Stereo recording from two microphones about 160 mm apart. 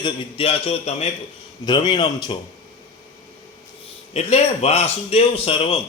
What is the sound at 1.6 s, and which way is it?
Speech, 30° left (ahead or behind).